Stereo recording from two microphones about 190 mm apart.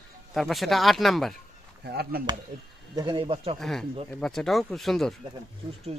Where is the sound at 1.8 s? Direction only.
55° right (ahead or behind).